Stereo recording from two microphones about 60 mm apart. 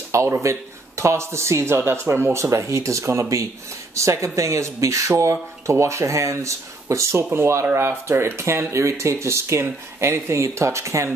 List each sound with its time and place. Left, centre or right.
0.1 s speech: right
2.5 s speech: right